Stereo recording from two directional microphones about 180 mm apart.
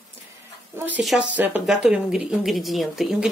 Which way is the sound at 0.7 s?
10° right (ahead or behind).